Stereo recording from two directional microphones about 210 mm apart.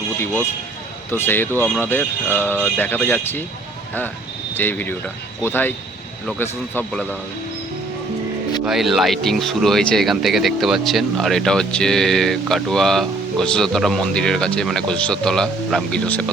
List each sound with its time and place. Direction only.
1.1 s speech: 10° left (ahead or behind)
4.5 s speech: 10° left (ahead or behind)
8.6 s speech: centre (ahead or behind)